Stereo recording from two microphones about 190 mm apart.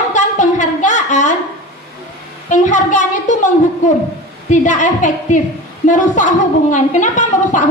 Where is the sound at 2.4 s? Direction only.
40° left (ahead or behind).